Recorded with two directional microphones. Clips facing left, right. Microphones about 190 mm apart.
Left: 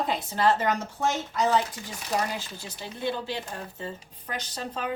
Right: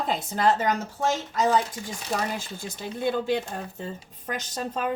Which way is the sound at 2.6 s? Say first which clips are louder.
Right 4 dB; 50° right (ahead or behind).